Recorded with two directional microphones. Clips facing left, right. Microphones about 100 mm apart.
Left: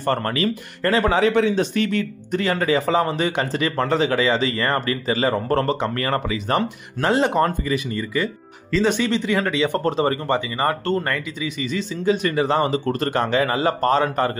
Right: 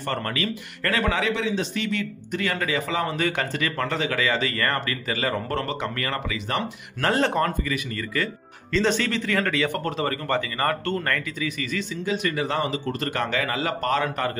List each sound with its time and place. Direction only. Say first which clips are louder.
0.0 s speech: left 6 dB; 35° left (ahead or behind)
1.3 s a man's voice: left 7 dB; 50° left (ahead or behind)
7.0 s speech: left 4 dB; 15° left (ahead or behind)
7.4 s a man's voice: left 4 dB; 30° left (ahead or behind)
8.7 s a man's voice: left 3 dB; 10° left (ahead or behind)
12.1 s speech: left 7 dB; 35° left (ahead or behind)